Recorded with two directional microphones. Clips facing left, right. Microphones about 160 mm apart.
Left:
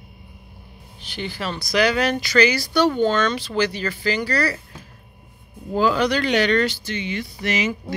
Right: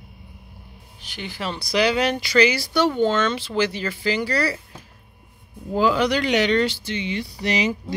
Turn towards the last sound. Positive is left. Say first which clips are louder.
# right 1 dB
turn(degrees=-30)  # may be behind; listen again after turning